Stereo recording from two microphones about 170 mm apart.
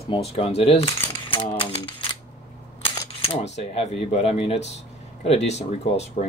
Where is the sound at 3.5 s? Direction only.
40° left (ahead or behind).